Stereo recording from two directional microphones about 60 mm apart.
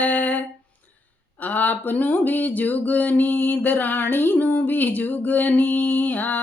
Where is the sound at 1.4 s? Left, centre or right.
Left.